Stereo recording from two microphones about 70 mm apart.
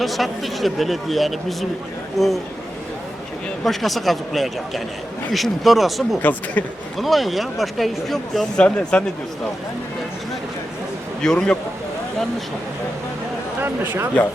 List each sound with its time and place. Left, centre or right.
0.0 s a man's voice: centre
3.6 s a man's voice: centre
6.2 s speech: left
7.0 s a man's voice: centre
8.5 s speech: centre
11.2 s speech: centre
13.6 s speech: right